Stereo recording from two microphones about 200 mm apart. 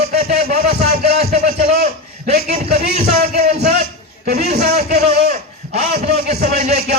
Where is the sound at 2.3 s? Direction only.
50° right (ahead or behind).